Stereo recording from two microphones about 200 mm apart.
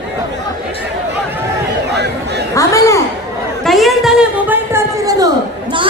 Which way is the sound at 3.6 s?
Centre (ahead or behind).